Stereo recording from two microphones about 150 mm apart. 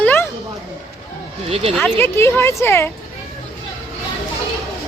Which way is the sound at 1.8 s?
15° left (ahead or behind).